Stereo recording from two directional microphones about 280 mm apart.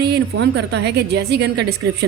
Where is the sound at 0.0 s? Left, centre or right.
Right.